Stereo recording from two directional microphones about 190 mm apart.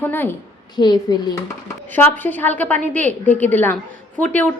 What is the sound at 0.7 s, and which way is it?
Speech, 20° left (ahead or behind).